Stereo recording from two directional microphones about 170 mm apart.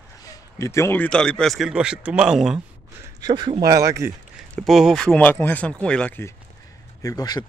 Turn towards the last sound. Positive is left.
turn(degrees=25)  # may be behind; listen again after turning